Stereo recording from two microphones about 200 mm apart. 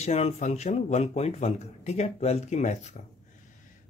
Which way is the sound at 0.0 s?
30° left (ahead or behind).